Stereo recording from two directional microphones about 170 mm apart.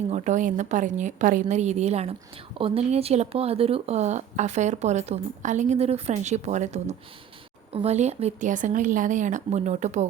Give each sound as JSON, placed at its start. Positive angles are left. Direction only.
{"t": 0.1, "sound": "speech", "side_deg": -45}